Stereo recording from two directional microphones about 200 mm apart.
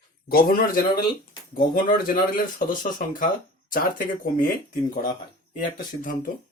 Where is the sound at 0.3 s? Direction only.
45° left (ahead or behind).